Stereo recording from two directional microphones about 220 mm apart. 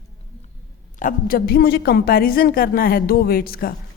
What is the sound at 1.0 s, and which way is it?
A woman's voice, 40° left (ahead or behind).